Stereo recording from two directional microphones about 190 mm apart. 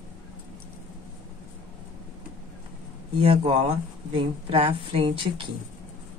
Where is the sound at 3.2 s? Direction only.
30° right (ahead or behind).